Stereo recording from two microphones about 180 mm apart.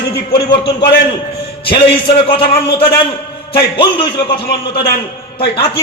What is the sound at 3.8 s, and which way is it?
Speech, 25° left (ahead or behind).